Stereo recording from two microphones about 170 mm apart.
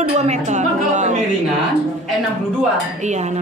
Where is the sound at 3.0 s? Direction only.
45° right (ahead or behind).